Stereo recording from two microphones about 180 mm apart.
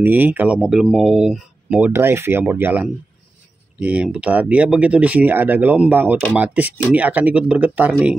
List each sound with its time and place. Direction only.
0.0 s speech: 10° right (ahead or behind)